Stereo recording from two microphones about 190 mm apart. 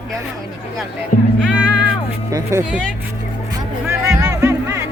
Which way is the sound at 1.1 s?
45° left (ahead or behind).